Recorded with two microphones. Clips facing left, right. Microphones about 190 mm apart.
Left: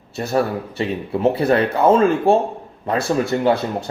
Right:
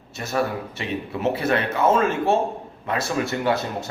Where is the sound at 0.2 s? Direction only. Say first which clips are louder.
Left 5 dB; 35° left (ahead or behind).